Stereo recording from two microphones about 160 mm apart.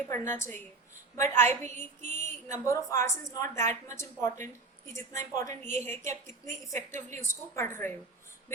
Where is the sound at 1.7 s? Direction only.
50° right (ahead or behind).